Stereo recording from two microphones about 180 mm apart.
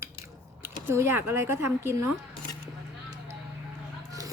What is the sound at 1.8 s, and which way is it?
Speech, 15° right (ahead or behind).